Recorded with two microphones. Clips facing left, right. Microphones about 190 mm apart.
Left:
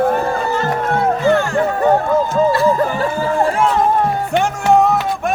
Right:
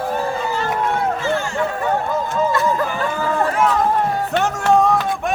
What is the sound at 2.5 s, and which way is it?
Chatter, 30° left (ahead or behind).